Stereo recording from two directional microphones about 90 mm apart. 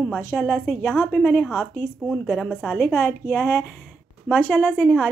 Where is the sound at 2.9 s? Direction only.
20° left (ahead or behind).